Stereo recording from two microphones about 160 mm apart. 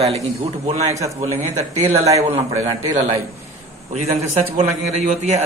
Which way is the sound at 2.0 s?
45° right (ahead or behind).